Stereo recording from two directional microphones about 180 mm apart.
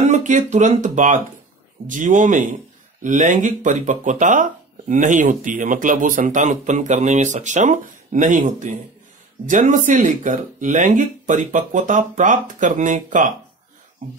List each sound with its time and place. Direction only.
0.0 s speech: 40° right (ahead or behind)